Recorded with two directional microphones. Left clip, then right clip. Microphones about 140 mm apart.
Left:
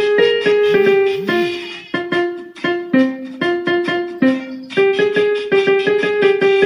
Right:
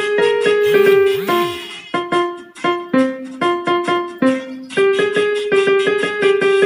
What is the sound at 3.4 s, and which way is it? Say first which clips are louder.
Music: even; 40° right (ahead or behind).